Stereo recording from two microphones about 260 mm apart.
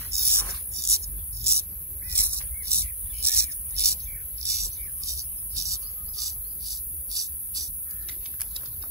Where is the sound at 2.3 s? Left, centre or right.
Right.